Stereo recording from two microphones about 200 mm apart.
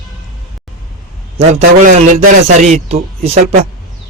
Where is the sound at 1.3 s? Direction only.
30° right (ahead or behind).